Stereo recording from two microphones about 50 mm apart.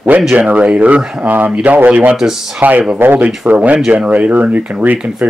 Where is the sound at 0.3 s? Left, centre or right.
Right.